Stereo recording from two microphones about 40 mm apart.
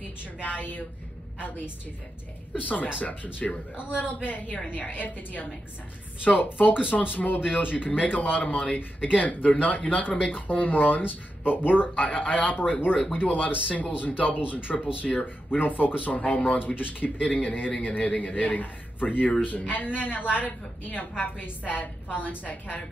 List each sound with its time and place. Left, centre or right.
0.4 s speech: left
2.6 s speech: left